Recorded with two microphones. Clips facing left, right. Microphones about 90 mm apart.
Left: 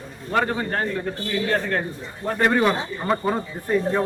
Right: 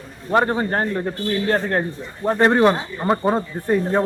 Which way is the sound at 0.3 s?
30° right (ahead or behind).